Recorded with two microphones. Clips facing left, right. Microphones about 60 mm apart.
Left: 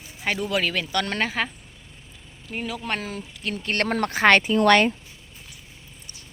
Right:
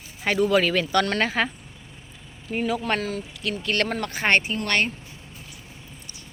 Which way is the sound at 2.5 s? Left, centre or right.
Centre.